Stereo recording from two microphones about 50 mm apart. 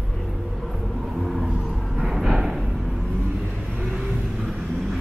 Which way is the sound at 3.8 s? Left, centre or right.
Right.